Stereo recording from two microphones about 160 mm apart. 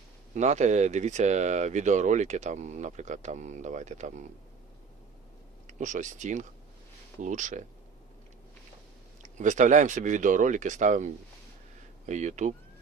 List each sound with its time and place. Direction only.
0.3 s speech: 45° right (ahead or behind)
5.6 s speech: 50° right (ahead or behind)
9.4 s speech: 50° right (ahead or behind)